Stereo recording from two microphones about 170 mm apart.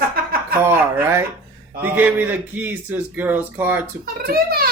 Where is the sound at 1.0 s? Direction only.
15° right (ahead or behind).